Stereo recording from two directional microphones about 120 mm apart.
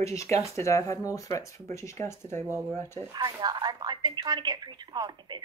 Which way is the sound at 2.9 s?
35° right (ahead or behind).